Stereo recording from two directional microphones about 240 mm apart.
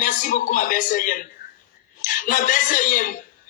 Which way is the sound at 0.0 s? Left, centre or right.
Left.